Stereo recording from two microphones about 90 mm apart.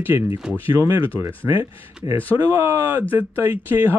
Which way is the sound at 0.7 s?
25° left (ahead or behind).